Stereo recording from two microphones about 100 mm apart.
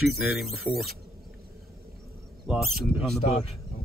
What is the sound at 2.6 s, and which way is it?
Speech, 5° left (ahead or behind).